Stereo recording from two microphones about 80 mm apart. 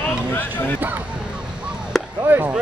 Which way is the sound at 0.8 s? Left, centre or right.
Right.